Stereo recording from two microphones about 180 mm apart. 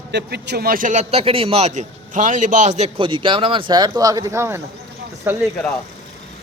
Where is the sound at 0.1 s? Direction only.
65° right (ahead or behind); by 5.5 s 10° right (ahead or behind).